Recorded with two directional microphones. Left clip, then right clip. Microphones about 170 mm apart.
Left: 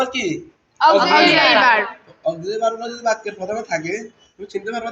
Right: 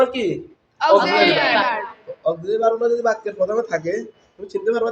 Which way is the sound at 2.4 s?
30° right (ahead or behind).